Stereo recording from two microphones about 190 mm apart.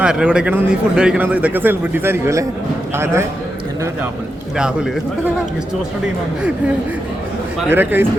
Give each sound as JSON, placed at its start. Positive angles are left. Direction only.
{"t": 0.0, "sound": "a man's voice", "side_deg": -5}
{"t": 4.5, "sound": "a man's voice", "side_deg": -5}
{"t": 7.7, "sound": "a man's voice", "side_deg": -10}